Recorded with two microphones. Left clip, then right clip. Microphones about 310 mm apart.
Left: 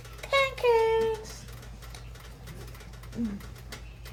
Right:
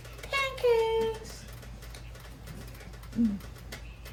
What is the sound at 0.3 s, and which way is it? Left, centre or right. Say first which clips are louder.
Child singing: left 3 dB; left.